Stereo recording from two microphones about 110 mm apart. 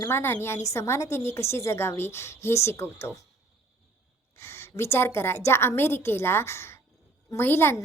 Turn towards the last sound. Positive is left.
turn(degrees=20)  # may be behind; listen again after turning